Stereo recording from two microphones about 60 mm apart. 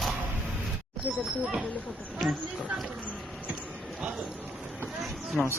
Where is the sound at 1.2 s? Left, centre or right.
Centre.